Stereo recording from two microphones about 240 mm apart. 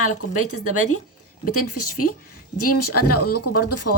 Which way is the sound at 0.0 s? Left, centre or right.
Left.